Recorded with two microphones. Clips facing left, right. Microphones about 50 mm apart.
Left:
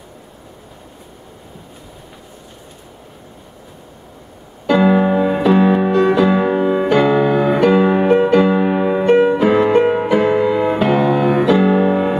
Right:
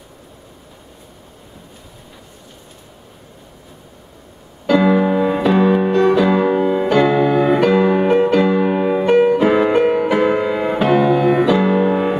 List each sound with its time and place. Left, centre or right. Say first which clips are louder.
4.6 s music: left 1 dB; centre
9.1 s music: even; left
9.4 s music: left 1 dB; centre
9.8 s music: left 1 dB; centre
10.1 s music: left 2 dB; centre